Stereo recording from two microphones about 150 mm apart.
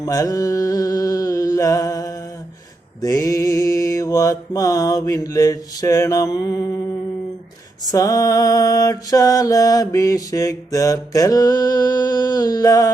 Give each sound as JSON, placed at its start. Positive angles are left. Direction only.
{"t": 0.0, "sound": "mantra", "side_deg": 25}
{"t": 7.9, "sound": "mantra", "side_deg": 25}